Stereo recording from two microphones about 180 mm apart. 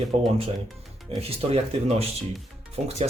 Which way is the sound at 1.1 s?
35° right (ahead or behind).